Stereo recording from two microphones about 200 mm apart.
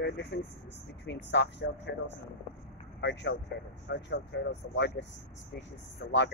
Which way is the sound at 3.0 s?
60° left (ahead or behind).